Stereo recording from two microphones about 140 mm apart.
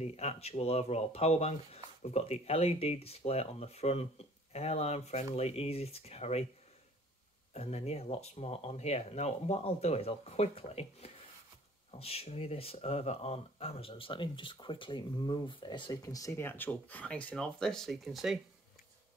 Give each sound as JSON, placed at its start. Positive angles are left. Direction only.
{"t": 0.0, "sound": "speech", "side_deg": 45}
{"t": 7.5, "sound": "speech", "side_deg": 50}